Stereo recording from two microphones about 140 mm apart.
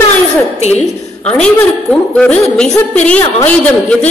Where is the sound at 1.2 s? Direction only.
10° left (ahead or behind).